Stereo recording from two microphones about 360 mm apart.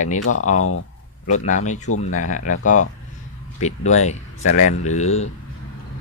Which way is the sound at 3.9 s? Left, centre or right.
Centre.